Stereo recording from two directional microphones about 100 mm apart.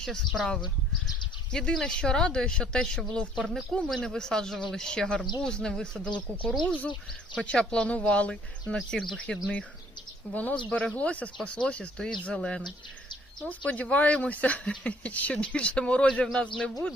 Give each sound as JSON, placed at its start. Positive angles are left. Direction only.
{"t": 0.0, "sound": "speech", "side_deg": 5}